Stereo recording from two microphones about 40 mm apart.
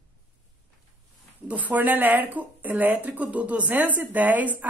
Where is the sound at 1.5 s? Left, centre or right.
Right.